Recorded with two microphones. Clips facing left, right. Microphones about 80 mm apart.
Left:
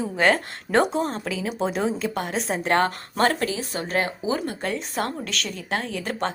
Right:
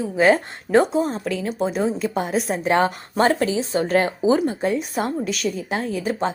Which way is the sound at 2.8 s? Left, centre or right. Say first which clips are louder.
Right 3 dB; centre.